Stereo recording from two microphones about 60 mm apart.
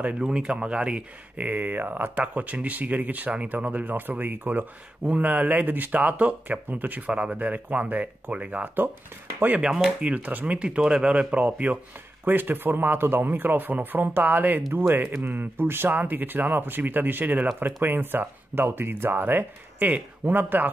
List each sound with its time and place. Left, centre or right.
0.0 s speech: centre
1.4 s speech: right
9.8 s speech: centre
12.3 s speech: right